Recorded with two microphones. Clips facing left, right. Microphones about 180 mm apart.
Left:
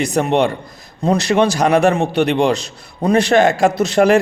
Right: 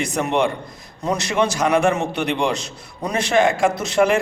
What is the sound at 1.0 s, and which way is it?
Speech, 65° left (ahead or behind).